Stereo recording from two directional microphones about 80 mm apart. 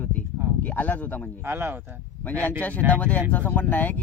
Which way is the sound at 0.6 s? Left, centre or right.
Left.